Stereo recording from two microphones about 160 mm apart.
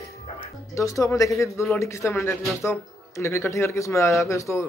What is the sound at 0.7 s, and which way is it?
A man's voice, 20° left (ahead or behind).